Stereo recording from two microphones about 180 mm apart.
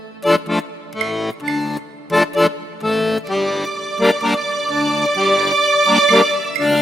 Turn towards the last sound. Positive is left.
turn(degrees=0)  # may be behind; listen again after turning